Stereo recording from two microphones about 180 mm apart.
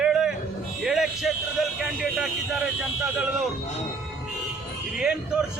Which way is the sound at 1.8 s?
Centre (ahead or behind).